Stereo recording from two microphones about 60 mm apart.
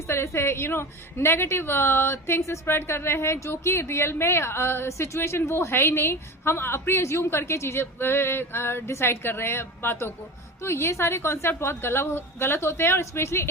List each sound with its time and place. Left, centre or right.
0.1 s a woman's voice: left